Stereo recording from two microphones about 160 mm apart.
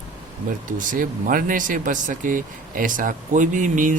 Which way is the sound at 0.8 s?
55° right (ahead or behind).